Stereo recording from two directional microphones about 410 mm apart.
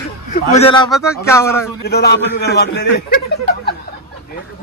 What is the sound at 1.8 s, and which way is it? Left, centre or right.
A man's voice, left.